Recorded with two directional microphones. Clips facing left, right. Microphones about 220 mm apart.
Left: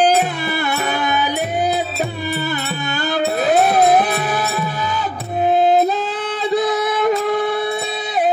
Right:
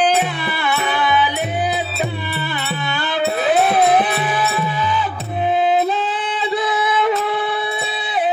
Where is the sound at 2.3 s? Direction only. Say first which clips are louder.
Left 3 dB; 45° left (ahead or behind).